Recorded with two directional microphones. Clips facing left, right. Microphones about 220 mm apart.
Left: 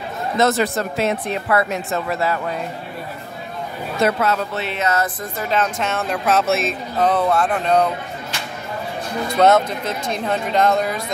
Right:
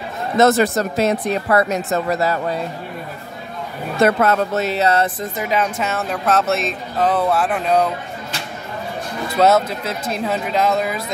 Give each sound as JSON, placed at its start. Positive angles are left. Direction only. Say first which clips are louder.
{"t": 0.4, "sound": "speech", "louder": "right 4 dB", "side_deg": -45}
{"t": 4.0, "sound": "speech", "louder": "right 4 dB", "side_deg": -50}
{"t": 5.4, "sound": "speech", "louder": "even", "side_deg": -10}
{"t": 9.4, "sound": "speech", "louder": "even", "side_deg": -5}